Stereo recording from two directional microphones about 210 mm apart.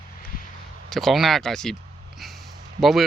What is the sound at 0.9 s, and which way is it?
Speech, centre (ahead or behind).